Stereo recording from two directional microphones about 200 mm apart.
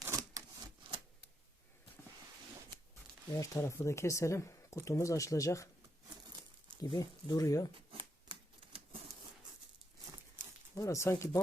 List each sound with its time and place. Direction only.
0.0 s a sound: 15° right (ahead or behind)
3.3 s speech: 15° left (ahead or behind)
6.8 s speech: 20° left (ahead or behind)
7.9 s typewriter: 25° right (ahead or behind)
10.8 s speech: 15° left (ahead or behind)